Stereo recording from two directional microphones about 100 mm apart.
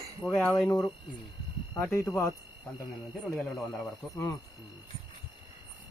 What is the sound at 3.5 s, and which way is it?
Speech, 5° left (ahead or behind).